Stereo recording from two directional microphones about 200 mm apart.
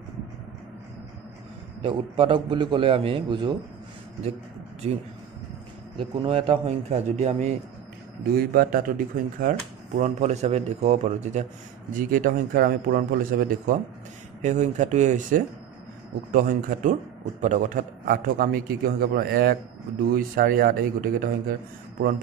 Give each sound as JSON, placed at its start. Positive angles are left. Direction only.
{"t": 1.8, "sound": "a man's voice", "side_deg": -25}
{"t": 4.8, "sound": "a man's voice", "side_deg": -30}
{"t": 8.4, "sound": "a man's voice", "side_deg": -45}